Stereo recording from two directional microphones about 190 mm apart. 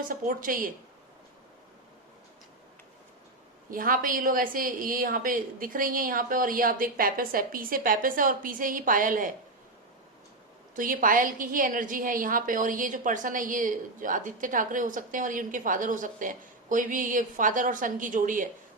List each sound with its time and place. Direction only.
0.1 s a woman's voice: 45° right (ahead or behind)
3.7 s a woman's voice: 45° right (ahead or behind)
10.8 s a woman's voice: 45° right (ahead or behind)